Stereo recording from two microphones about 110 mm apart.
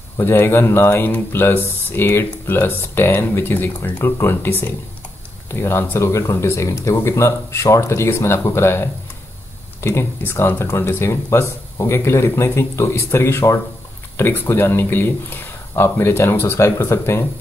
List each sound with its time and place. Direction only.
0.2 s speech: 20° left (ahead or behind)